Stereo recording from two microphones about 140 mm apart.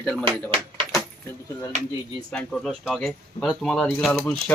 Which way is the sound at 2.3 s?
5° left (ahead or behind).